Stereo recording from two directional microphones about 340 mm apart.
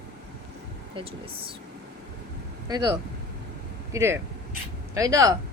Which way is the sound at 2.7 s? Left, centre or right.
Centre.